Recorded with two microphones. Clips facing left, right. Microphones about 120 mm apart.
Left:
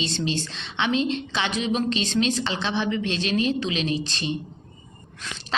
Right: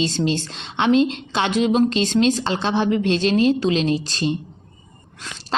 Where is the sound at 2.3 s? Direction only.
45° right (ahead or behind).